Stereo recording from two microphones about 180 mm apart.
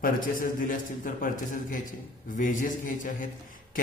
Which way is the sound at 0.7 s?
50° left (ahead or behind).